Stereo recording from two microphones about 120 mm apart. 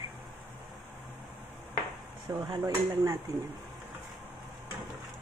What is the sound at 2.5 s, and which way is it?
Speech, 30° right (ahead or behind).